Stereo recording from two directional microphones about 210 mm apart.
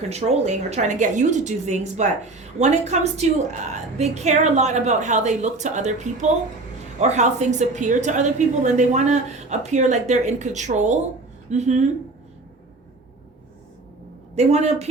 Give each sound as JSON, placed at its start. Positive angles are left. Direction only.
{"t": 0.1, "sound": "a woman's voice", "side_deg": -30}
{"t": 14.3, "sound": "a woman's voice", "side_deg": -30}